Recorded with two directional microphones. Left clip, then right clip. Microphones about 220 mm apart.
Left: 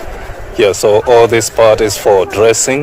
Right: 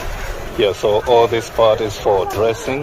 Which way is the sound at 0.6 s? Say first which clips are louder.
Left 6 dB; 30° left (ahead or behind).